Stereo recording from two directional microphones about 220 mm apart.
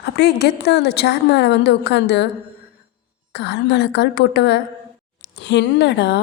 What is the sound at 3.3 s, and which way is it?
A woman's voice, 50° left (ahead or behind).